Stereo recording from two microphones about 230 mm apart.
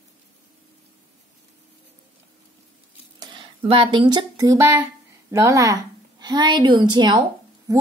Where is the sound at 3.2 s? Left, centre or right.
Right.